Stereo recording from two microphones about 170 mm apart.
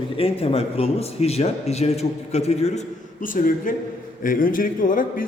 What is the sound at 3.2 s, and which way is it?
A man's voice, 50° left (ahead or behind).